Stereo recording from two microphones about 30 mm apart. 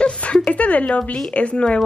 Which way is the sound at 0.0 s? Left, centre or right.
Left.